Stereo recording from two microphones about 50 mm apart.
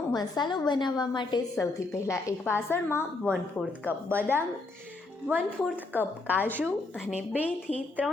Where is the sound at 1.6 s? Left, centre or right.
Left.